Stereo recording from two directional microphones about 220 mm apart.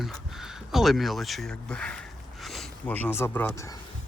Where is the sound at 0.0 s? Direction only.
Centre (ahead or behind); by 3.8 s 15° left (ahead or behind).